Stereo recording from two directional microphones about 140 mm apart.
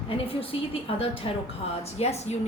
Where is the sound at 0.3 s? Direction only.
40° left (ahead or behind).